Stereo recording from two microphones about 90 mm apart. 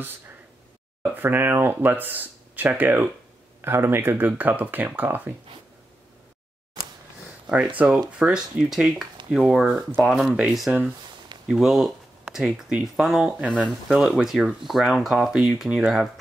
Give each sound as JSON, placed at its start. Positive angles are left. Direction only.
{"t": 1.1, "sound": "speech", "side_deg": -25}
{"t": 7.4, "sound": "speech", "side_deg": -15}